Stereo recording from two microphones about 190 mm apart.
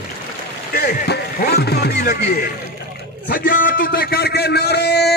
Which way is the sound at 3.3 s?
45° left (ahead or behind).